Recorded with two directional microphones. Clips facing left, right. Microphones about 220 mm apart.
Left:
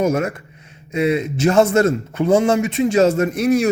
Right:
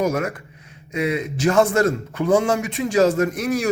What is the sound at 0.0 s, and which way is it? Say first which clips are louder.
A man's voice: left 3 dB; 25° left (ahead or behind).